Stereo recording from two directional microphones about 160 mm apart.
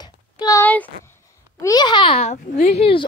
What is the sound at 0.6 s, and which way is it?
A child's voice, 10° left (ahead or behind).